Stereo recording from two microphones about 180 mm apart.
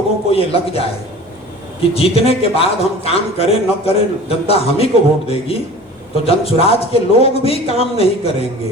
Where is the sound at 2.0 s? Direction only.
35° left (ahead or behind).